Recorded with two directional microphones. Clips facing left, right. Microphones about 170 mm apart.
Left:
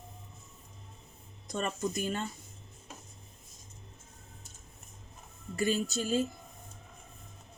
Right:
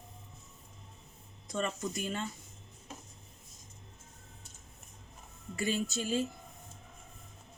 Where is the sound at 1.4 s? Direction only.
40° left (ahead or behind).